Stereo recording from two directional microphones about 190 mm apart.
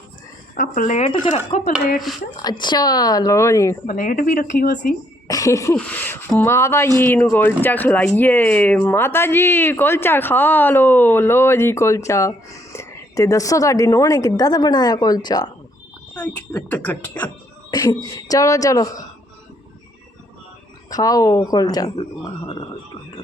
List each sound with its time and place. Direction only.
0.5 s speech: 45° left (ahead or behind); by 3.8 s 15° left (ahead or behind)
3.8 s speech: 45° left (ahead or behind)
5.3 s a sound: 15° left (ahead or behind)
5.7 s speech: 5° left (ahead or behind)
16.1 s speech: 10° left (ahead or behind)
17.7 s speech: 20° left (ahead or behind)
20.9 s speech: 20° left (ahead or behind)
21.9 s speech: 30° left (ahead or behind)